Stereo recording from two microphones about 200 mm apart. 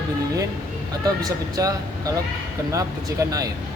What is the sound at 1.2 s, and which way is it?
A man's voice, 20° right (ahead or behind).